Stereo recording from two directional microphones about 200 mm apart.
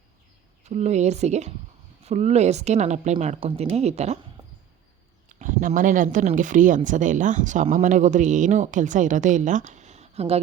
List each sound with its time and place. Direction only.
0.6 s speech: 35° right (ahead or behind)
5.3 s speech: 40° right (ahead or behind)